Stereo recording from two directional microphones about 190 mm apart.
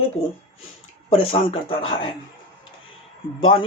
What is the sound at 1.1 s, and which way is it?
Speech, 30° left (ahead or behind).